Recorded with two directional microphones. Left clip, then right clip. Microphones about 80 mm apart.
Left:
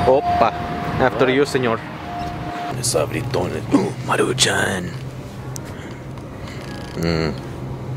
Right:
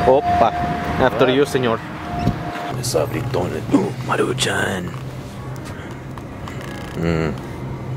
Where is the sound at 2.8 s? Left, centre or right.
Centre.